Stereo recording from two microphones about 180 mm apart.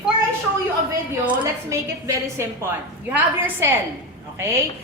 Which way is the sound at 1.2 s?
10° right (ahead or behind).